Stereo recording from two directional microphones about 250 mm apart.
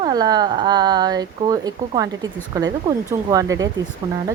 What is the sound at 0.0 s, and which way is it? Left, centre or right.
Speech, centre.